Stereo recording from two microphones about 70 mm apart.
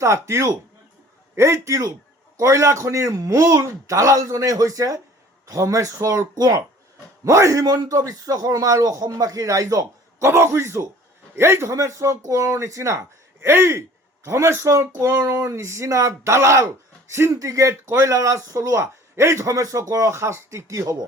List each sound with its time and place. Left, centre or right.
0.0 s a man's voice: right
7.3 s a man's voice: right
7.6 s a man's voice: right
10.2 s a man's voice: right
17.8 s a man's voice: right
19.5 s a man's voice: right